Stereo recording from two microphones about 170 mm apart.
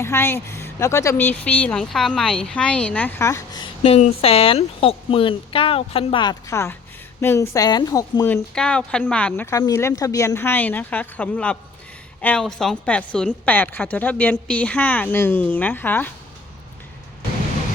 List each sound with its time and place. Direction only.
0.0 s a woman's voice: 15° left (ahead or behind)
3.8 s a woman's voice: 35° left (ahead or behind)
6.5 s a woman's voice: 15° left (ahead or behind)
8.3 s a woman's voice: 10° left (ahead or behind)